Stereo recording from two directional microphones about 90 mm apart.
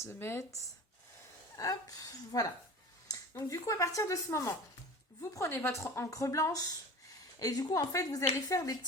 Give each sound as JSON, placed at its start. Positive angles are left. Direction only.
{"t": 0.0, "sound": "speech", "side_deg": 25}